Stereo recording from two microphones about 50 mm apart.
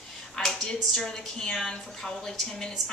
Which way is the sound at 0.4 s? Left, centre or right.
Centre.